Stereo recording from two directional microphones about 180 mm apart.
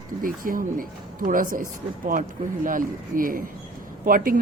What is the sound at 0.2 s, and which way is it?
Speech, 50° right (ahead or behind).